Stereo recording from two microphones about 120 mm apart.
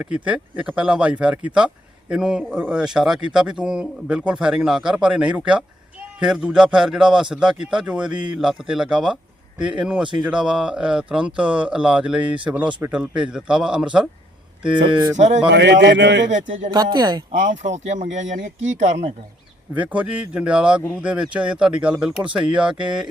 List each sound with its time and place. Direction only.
0.0 s a man's voice: 10° right (ahead or behind)
15.1 s speech: 75° right (ahead or behind)
16.3 s speech: 90° right
16.7 s speech: 35° right (ahead or behind)
17.3 s speech: 85° right
19.7 s speech: 10° right (ahead or behind)